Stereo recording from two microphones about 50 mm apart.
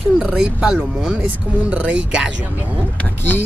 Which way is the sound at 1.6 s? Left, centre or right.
Right.